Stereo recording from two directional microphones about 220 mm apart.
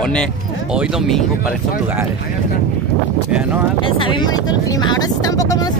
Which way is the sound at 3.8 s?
20° left (ahead or behind).